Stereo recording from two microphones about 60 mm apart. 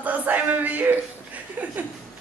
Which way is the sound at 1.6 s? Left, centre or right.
Right.